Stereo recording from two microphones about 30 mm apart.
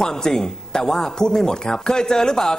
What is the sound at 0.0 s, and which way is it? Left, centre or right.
Speech, left.